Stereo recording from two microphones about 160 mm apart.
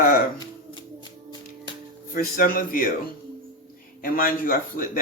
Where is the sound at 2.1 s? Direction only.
65° left (ahead or behind).